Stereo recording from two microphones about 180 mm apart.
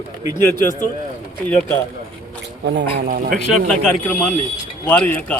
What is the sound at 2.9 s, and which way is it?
Speech, 50° right (ahead or behind).